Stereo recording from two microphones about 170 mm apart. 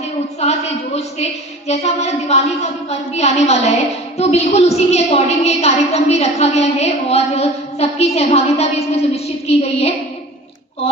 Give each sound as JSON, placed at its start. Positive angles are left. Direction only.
{"t": 0.9, "sound": "a woman's voice", "side_deg": 40}